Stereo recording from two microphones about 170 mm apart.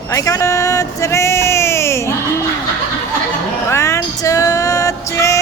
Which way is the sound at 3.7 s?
15° left (ahead or behind).